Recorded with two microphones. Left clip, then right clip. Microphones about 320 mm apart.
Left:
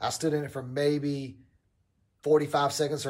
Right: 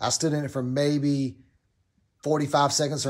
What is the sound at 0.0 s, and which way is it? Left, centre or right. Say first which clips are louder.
Speech: right 3 dB; centre.